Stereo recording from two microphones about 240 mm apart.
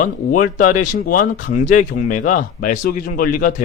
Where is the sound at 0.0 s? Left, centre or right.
Left.